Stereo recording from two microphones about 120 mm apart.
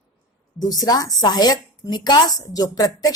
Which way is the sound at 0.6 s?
35° left (ahead or behind).